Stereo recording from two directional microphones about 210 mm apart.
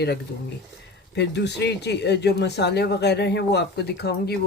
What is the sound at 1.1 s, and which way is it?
Speech, 55° left (ahead or behind).